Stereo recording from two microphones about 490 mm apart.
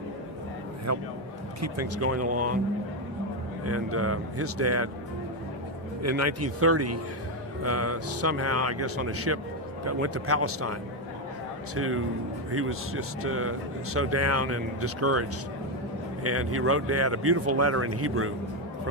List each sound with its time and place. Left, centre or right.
0.9 s a man's voice: right
3.7 s speech: right
6.0 s speech: right